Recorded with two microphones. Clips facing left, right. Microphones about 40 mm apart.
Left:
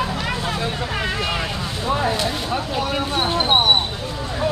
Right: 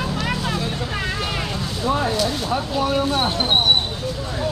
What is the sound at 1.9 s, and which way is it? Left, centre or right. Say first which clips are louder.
Speech: even; centre.